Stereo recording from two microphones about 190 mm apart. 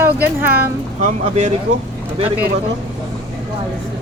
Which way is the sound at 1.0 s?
40° right (ahead or behind).